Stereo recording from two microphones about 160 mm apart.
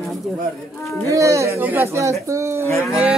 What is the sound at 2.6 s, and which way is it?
Dog, 15° left (ahead or behind).